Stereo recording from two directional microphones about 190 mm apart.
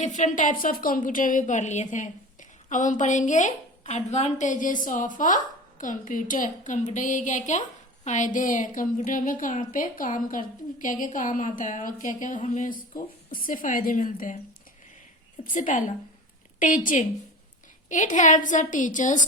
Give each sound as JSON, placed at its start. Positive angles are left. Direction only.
{"t": 0.0, "sound": "a woman's voice", "side_deg": 40}
{"t": 15.5, "sound": "speech", "side_deg": 40}